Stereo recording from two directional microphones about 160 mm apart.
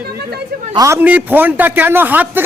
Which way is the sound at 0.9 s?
10° right (ahead or behind).